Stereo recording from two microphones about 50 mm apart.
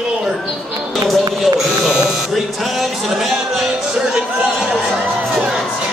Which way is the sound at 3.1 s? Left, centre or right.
Centre.